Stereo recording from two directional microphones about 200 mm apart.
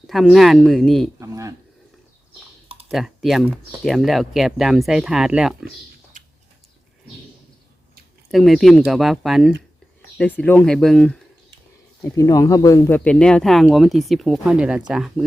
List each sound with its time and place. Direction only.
0.1 s speech: centre (ahead or behind)
1.2 s a sound: 15° right (ahead or behind)
2.9 s speech: centre (ahead or behind)
8.3 s speech: centre (ahead or behind)
12.0 s speech: 15° left (ahead or behind); by 15.1 s 5° right (ahead or behind)